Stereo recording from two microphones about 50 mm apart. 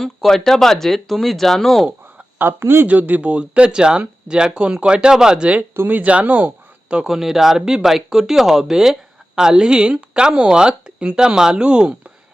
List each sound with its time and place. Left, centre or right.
0.0 s speech: centre
2.4 s speech: right
2.8 s speech: right; by 5.5 s centre
5.7 s speech: right
6.0 s speech: right
7.0 s speech: centre